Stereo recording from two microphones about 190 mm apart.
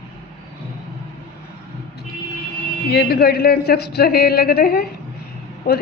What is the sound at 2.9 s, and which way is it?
A woman's voice, 55° left (ahead or behind).